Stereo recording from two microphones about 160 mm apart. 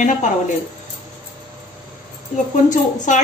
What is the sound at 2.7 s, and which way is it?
Speech, 50° left (ahead or behind).